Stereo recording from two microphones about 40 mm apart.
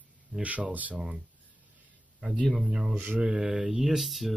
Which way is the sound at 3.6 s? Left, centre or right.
Centre.